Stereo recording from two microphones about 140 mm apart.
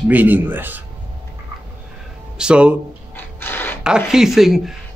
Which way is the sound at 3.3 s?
15° left (ahead or behind).